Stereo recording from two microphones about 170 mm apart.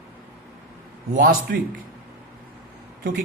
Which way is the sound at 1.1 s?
55° right (ahead or behind).